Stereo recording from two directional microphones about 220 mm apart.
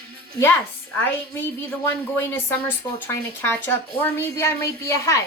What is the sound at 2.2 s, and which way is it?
Speech, 10° left (ahead or behind).